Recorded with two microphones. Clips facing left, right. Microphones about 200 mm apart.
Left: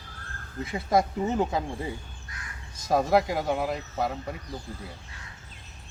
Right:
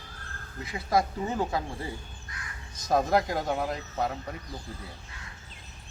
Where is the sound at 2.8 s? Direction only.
5° left (ahead or behind).